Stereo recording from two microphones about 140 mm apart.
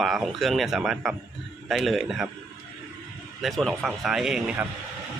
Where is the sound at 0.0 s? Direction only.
Centre (ahead or behind).